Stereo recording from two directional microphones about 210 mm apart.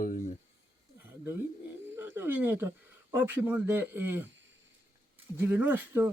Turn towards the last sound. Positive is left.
turn(degrees=-10)  # may be behind; listen again after turning